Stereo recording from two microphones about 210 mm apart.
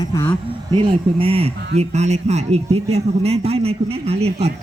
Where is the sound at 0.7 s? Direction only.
25° right (ahead or behind).